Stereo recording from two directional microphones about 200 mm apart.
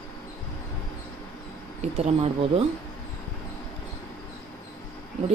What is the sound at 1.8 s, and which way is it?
Speech, 30° right (ahead or behind).